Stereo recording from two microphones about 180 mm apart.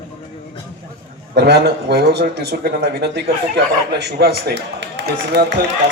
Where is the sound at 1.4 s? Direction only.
65° right (ahead or behind).